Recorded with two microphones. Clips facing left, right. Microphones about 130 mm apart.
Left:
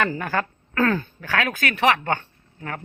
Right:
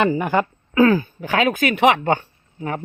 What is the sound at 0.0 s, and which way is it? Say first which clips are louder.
Speech: right 6 dB; 20° right (ahead or behind).